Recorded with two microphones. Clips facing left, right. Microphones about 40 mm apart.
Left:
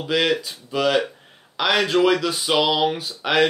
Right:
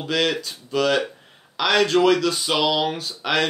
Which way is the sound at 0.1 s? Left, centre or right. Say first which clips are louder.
Left 2 dB; centre.